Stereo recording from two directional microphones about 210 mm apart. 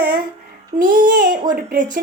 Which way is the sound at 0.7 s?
40° right (ahead or behind).